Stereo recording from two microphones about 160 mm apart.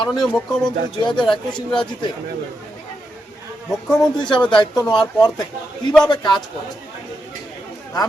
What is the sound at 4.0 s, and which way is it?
A man's voice, 30° left (ahead or behind).